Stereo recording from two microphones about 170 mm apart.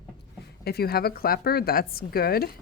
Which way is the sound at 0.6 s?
70° left (ahead or behind).